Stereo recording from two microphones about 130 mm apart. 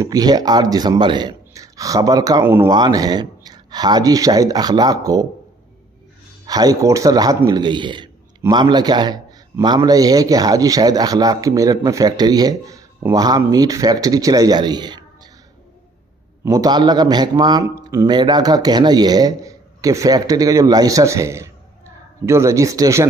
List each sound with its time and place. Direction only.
0.0 s speech: 30° right (ahead or behind)
2.4 s speech: 15° right (ahead or behind)
2.7 s speech: 30° right (ahead or behind)
6.4 s a man's voice: 30° right (ahead or behind)
16.4 s a man's voice: 30° right (ahead or behind)